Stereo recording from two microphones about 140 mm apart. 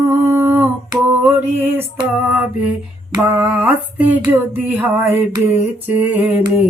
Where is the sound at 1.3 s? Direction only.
15° right (ahead or behind).